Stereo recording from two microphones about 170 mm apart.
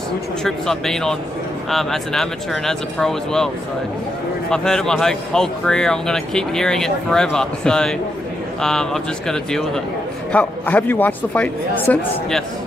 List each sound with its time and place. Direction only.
0.4 s speech: 5° left (ahead or behind)
4.5 s speech: 5° left (ahead or behind)